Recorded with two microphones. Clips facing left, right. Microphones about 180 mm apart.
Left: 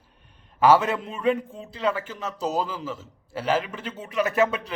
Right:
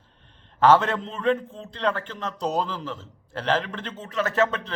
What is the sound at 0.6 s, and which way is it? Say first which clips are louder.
A man's voice: even; 10° left (ahead or behind).